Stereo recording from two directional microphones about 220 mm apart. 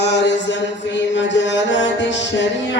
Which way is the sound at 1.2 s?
55° left (ahead or behind).